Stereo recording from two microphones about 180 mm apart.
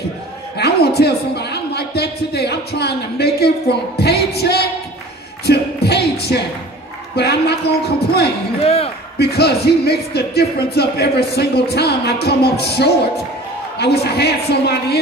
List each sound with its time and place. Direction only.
0.6 s a man's voice: 60° left (ahead or behind)
8.6 s a man's voice: 35° left (ahead or behind)
9.2 s speech: 65° left (ahead or behind)